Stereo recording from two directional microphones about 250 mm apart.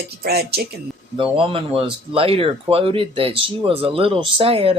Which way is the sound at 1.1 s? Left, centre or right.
Right.